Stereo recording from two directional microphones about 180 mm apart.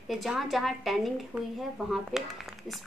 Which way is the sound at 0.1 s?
Centre (ahead or behind).